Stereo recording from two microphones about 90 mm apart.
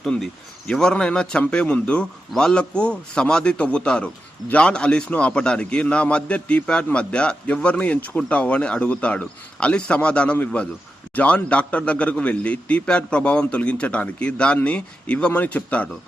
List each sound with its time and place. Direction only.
0.0 s a man's voice: 5° left (ahead or behind)